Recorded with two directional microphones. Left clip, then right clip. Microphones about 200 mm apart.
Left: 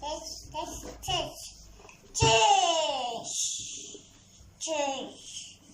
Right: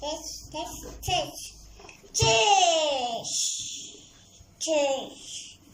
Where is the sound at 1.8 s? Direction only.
15° right (ahead or behind).